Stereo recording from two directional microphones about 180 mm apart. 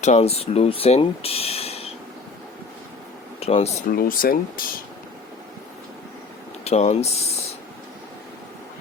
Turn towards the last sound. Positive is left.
turn(degrees=35)  # may be behind; listen again after turning